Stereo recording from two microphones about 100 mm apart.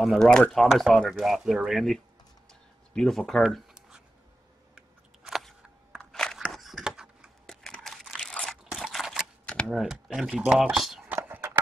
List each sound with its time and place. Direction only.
0.0 s speech: 5° left (ahead or behind)
3.4 s a sound: 10° right (ahead or behind)
7.4 s crunch: 5° left (ahead or behind)
8.7 s camera: 5° right (ahead or behind)
9.7 s speech: centre (ahead or behind)
11.1 s a sound: 20° right (ahead or behind)